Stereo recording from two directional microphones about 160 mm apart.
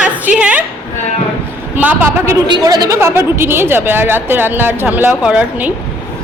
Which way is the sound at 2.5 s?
25° right (ahead or behind).